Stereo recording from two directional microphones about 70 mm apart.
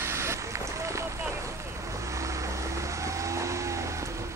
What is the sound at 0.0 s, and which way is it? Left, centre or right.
Vehicle, right.